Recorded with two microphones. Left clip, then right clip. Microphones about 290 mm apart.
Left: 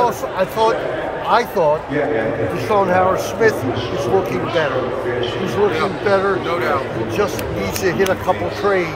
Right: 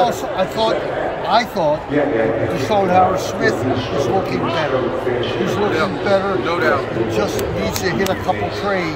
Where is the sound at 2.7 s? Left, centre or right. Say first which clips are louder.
Even; centre.